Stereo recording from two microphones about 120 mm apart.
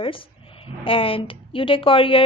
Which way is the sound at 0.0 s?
50° left (ahead or behind).